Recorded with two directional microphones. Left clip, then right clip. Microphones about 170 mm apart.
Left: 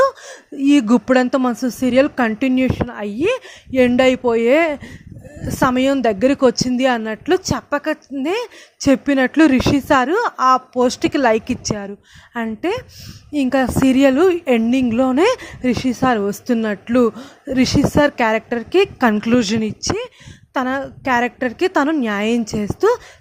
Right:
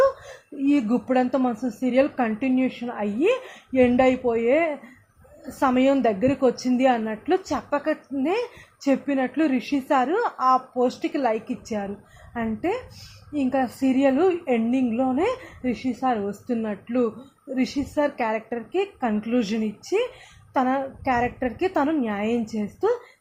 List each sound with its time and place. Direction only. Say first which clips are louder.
0.6 s a woman's voice: left 8 dB; 35° left (ahead or behind)